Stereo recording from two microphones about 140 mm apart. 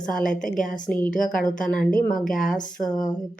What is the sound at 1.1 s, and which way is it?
Speech, 70° left (ahead or behind).